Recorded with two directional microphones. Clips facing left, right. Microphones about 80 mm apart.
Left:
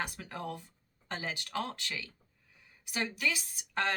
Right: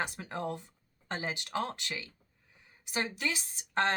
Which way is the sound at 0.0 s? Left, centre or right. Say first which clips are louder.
Right 3 dB; right.